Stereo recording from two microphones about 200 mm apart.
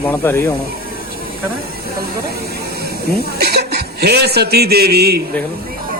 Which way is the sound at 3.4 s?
55° right (ahead or behind).